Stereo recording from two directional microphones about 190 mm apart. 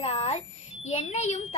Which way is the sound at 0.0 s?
35° left (ahead or behind).